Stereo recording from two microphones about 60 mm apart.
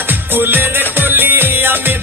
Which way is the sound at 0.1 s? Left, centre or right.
Right.